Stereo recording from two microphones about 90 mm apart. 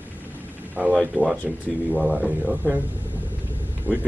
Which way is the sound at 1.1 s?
20° left (ahead or behind).